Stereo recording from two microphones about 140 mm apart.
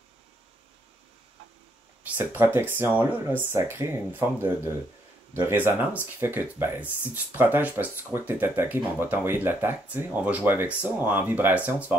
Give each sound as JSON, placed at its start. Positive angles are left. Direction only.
{"t": 2.0, "sound": "speech", "side_deg": -15}